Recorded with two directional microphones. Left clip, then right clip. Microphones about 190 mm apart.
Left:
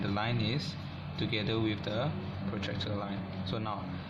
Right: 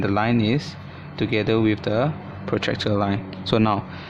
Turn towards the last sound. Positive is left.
turn(degrees=-55)  # may be behind; listen again after turning